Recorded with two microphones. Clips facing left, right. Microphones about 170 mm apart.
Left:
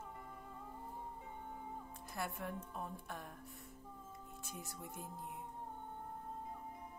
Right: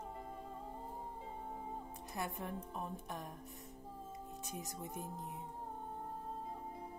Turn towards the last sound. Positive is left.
turn(degrees=-20)  # may be behind; listen again after turning